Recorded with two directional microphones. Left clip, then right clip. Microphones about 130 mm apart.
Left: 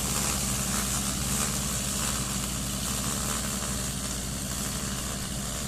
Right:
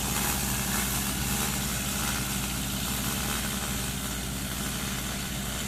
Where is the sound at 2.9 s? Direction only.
30° left (ahead or behind).